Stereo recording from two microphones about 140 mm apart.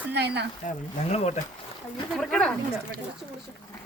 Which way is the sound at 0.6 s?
55° left (ahead or behind).